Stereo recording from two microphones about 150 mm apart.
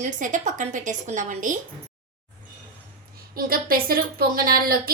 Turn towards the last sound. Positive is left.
turn(degrees=-85)